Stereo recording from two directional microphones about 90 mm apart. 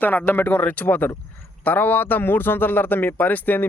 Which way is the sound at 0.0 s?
20° left (ahead or behind).